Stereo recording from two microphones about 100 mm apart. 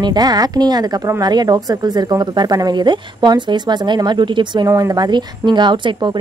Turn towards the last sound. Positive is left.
turn(degrees=-50)  # may be behind; listen again after turning